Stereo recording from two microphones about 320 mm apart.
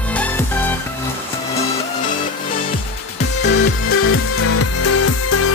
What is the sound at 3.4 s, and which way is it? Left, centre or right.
Music, left.